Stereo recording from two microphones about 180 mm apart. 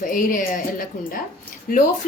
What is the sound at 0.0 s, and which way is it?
Speech, 50° left (ahead or behind).